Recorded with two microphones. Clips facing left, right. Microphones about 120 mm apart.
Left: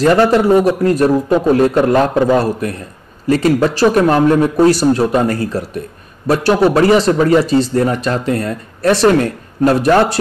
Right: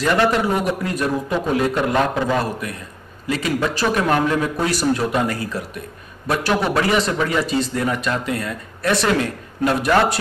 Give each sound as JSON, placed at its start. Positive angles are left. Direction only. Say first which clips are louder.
{"t": 0.0, "sound": "speech", "louder": "left 7 dB", "side_deg": 40}